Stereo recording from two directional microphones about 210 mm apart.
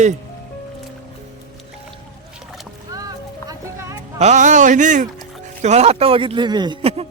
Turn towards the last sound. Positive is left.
turn(degrees=-30)  # may be behind; listen again after turning